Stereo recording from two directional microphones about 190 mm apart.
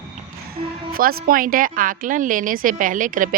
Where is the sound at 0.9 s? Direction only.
50° right (ahead or behind).